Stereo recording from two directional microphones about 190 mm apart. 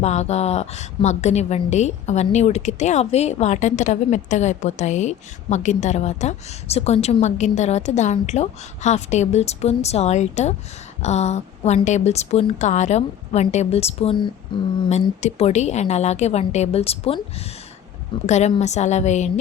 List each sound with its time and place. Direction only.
0.0 s a woman's voice: 35° left (ahead or behind)